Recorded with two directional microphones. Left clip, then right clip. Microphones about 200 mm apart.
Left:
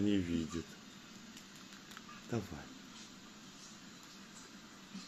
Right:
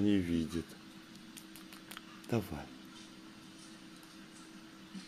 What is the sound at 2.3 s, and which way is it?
Speech, 35° right (ahead or behind).